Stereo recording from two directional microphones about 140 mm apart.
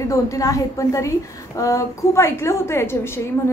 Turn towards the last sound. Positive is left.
turn(degrees=20)  # may be behind; listen again after turning